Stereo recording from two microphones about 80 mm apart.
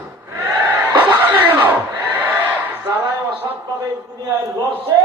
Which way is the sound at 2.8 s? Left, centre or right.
Right.